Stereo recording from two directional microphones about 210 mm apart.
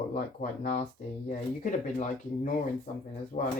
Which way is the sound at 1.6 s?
40° left (ahead or behind).